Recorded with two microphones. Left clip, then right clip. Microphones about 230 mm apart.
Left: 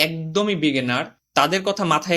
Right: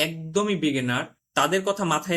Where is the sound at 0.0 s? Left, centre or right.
Left.